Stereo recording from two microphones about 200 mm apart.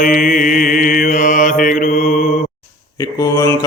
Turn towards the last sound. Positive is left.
turn(degrees=15)  # may be behind; listen again after turning